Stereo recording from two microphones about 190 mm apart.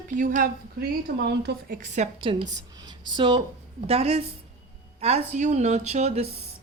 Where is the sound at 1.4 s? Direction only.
55° right (ahead or behind); by 6.2 s 35° right (ahead or behind).